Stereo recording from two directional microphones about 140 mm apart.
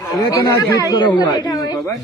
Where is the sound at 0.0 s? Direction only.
25° left (ahead or behind).